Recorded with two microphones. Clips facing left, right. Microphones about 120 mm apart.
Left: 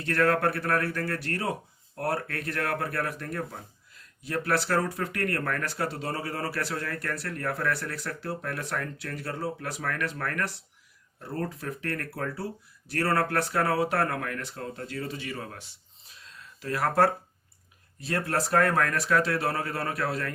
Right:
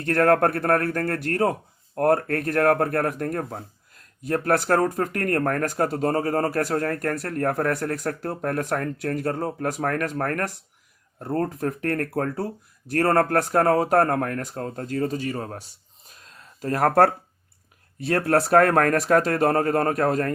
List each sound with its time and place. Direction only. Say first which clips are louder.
0.0 s speech: right 6 dB; 50° right (ahead or behind)
16.0 s a sound: right 1 dB; 50° right (ahead or behind)
18.0 s speech: right 8 dB; 60° right (ahead or behind)